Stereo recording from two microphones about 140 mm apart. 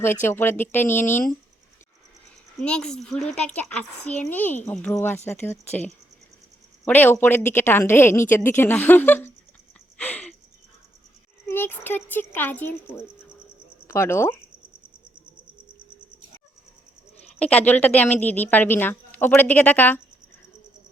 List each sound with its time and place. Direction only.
0.3 s a woman's voice: 15° left (ahead or behind)
2.6 s a woman's voice: 5° left (ahead or behind)
4.0 s speech: 55° left (ahead or behind)
4.3 s a woman's voice: 10° left (ahead or behind)
6.8 s a woman's voice: 15° left (ahead or behind)
10.0 s a sound: 10° left (ahead or behind)
11.4 s a woman's voice: 15° left (ahead or behind)
17.4 s a woman's voice: 10° left (ahead or behind)